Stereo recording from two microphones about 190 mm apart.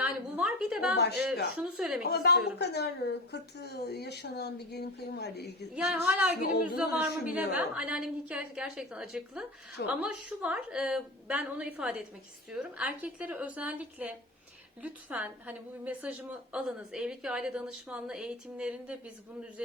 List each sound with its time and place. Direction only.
0.0 s a sound: 5° right (ahead or behind)
1.1 s a woman's voice: 5° right (ahead or behind)
2.0 s speech: 60° left (ahead or behind)
5.7 s a woman's voice: 5° right (ahead or behind)